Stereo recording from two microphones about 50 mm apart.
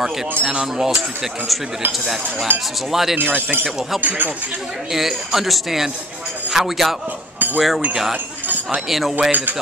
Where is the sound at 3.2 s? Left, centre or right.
Right.